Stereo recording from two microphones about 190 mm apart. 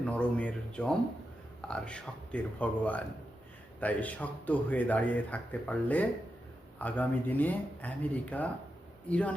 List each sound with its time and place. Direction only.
0.0 s a man's voice: 5° left (ahead or behind)